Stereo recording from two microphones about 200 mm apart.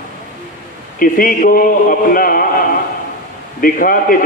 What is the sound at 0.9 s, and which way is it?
A man's voice, 45° left (ahead or behind).